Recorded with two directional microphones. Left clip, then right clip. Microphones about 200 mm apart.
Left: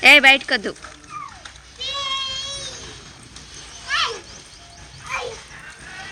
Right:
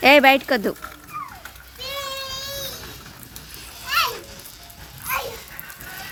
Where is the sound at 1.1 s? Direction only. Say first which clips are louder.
Right 1 dB; 60° right (ahead or behind).